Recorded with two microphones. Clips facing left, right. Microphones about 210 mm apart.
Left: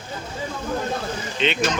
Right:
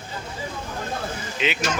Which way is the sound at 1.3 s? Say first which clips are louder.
Left 3 dB; 5° right (ahead or behind).